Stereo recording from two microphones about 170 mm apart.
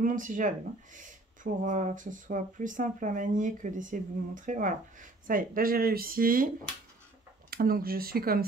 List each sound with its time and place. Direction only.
0.0 s speech: 50° right (ahead or behind)
7.5 s speech: 60° right (ahead or behind)